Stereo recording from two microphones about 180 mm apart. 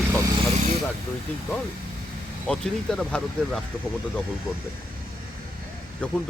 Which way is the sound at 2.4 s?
5° left (ahead or behind).